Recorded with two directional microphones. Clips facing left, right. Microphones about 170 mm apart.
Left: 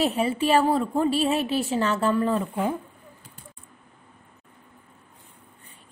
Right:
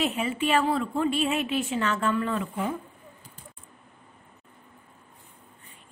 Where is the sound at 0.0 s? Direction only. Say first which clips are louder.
Left 4 dB; 35° left (ahead or behind).